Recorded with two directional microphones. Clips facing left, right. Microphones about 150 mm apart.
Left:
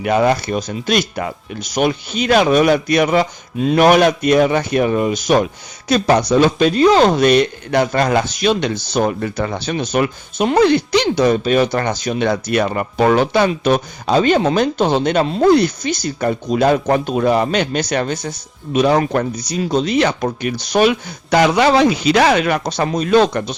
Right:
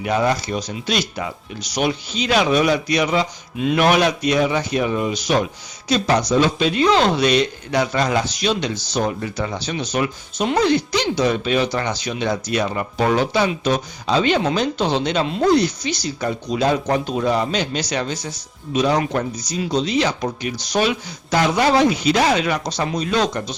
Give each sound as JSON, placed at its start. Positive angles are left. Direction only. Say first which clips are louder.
{"t": 0.0, "sound": "speech", "louder": "left 4 dB", "side_deg": 60}
{"t": 19.6, "sound": "speech", "louder": "left 4 dB", "side_deg": 50}